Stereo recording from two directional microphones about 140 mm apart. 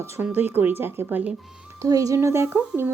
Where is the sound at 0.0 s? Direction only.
15° right (ahead or behind).